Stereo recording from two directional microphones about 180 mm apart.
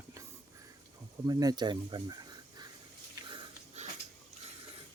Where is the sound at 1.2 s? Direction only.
20° right (ahead or behind).